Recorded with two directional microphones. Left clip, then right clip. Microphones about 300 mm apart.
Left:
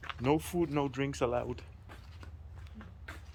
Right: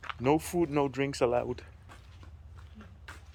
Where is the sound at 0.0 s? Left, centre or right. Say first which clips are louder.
Right 3 dB; centre.